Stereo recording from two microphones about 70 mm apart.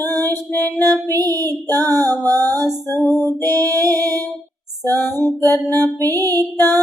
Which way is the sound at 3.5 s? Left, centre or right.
Right.